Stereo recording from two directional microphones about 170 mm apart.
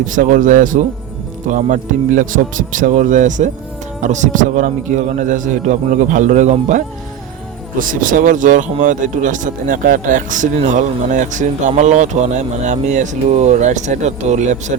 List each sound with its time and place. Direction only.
0.0 s speech: 50° right (ahead or behind)